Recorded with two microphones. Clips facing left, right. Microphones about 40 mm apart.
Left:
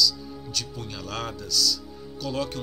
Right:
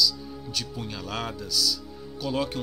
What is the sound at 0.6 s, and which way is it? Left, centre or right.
Speech, centre.